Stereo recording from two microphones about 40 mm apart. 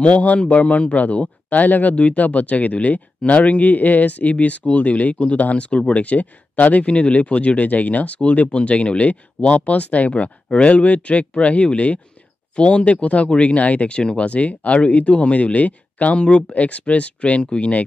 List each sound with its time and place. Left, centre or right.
0.0 s speech: left